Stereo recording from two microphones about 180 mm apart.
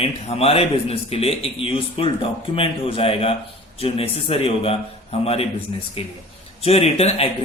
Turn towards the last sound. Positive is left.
turn(degrees=35)  # may be behind; listen again after turning